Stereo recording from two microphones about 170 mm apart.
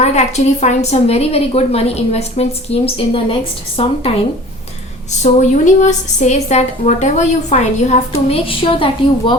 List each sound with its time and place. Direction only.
0.0 s a woman's voice: 40° left (ahead or behind)
5.2 s a woman's voice: 45° left (ahead or behind)